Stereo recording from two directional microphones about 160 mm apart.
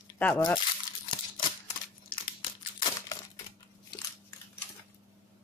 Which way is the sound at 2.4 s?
30° left (ahead or behind).